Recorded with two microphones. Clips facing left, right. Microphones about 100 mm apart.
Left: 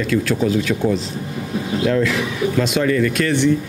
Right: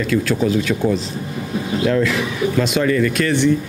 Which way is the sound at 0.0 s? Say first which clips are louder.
Even; 15° right (ahead or behind).